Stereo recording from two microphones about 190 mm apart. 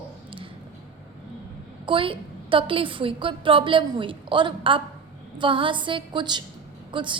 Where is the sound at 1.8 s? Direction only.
25° right (ahead or behind).